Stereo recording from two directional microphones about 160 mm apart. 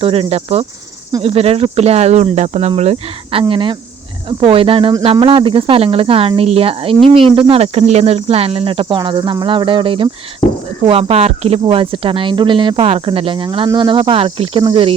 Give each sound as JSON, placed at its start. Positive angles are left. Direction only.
{"t": 0.0, "sound": "speech", "side_deg": -35}